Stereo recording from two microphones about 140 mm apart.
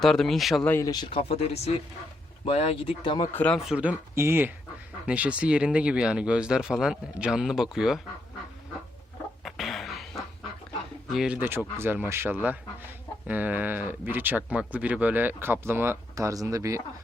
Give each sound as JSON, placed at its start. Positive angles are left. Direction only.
{"t": 0.0, "sound": "speech", "side_deg": 5}
{"t": 0.7, "sound": "speech", "side_deg": 25}
{"t": 1.1, "sound": "speech", "side_deg": 50}
{"t": 3.3, "sound": "speech", "side_deg": 10}
{"t": 3.6, "sound": "speech", "side_deg": -5}
{"t": 9.4, "sound": "cough", "side_deg": 0}
{"t": 11.1, "sound": "speech", "side_deg": -5}